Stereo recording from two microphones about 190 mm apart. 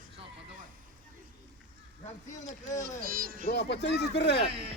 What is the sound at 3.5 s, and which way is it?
Speech, 60° left (ahead or behind).